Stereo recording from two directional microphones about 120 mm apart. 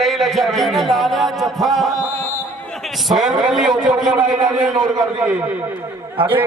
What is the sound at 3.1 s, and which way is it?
A man's voice, centre (ahead or behind).